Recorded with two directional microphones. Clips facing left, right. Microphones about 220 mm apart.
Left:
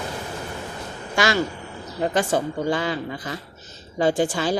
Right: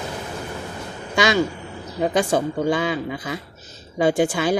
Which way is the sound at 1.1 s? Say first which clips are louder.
Right 3 dB; 20° right (ahead or behind).